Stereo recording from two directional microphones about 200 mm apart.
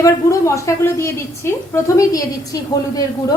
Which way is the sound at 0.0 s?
15° left (ahead or behind).